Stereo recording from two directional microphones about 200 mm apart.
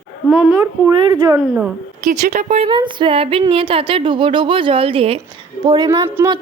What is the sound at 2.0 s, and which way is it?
A woman's voice, 40° right (ahead or behind).